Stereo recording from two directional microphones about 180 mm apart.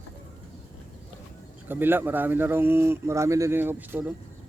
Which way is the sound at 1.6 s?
10° right (ahead or behind).